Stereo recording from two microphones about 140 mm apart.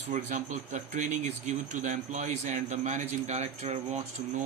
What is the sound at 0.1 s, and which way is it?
Speech, 60° right (ahead or behind).